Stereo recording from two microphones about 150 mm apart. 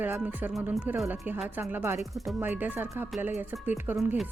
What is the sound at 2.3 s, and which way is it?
A woman's voice, 15° right (ahead or behind).